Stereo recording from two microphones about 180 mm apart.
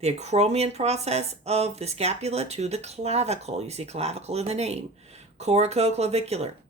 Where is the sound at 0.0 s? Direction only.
35° right (ahead or behind).